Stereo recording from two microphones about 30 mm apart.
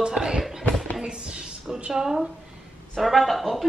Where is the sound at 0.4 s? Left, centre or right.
Centre.